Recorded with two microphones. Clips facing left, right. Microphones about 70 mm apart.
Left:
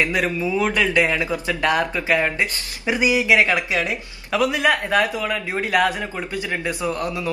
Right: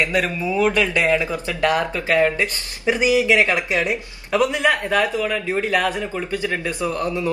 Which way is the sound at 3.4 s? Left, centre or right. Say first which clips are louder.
Right 1 dB; right.